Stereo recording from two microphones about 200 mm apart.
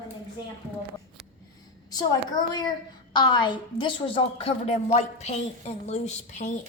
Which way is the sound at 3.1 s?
20° left (ahead or behind).